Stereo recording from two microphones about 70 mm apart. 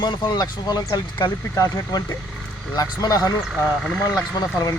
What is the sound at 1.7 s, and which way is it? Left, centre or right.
Speech, left.